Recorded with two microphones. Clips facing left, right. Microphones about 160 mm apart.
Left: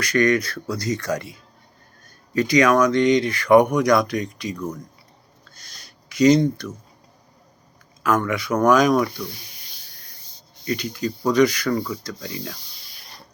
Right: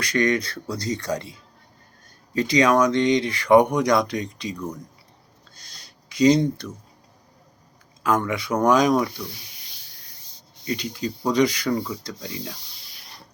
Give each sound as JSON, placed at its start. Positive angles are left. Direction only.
{"t": 0.0, "sound": "speech", "side_deg": -25}
{"t": 5.5, "sound": "a sound", "side_deg": -30}
{"t": 8.0, "sound": "speech", "side_deg": -30}
{"t": 9.3, "sound": "snake", "side_deg": 45}
{"t": 10.7, "sound": "speech", "side_deg": -25}